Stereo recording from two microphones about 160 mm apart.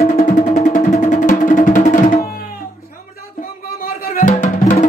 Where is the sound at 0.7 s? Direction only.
55° left (ahead or behind).